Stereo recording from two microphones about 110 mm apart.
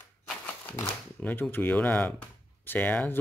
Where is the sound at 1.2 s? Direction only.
15° left (ahead or behind).